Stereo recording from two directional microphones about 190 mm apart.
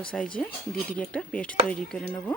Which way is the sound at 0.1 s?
5° left (ahead or behind).